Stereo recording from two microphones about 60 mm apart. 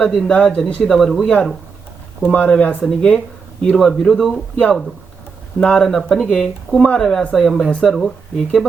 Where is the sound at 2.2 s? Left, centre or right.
Left.